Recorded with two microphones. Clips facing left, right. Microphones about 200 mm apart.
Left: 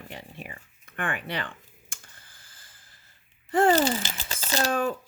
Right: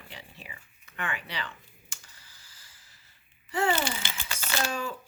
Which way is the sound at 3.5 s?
50° left (ahead or behind).